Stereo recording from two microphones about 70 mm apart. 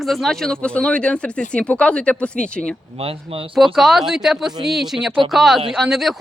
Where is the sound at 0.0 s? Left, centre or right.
Centre.